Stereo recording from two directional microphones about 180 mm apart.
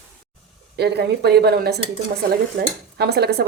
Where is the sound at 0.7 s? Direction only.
65° right (ahead or behind).